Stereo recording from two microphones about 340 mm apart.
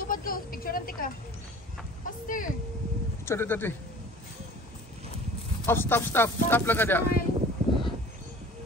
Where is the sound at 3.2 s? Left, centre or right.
Centre.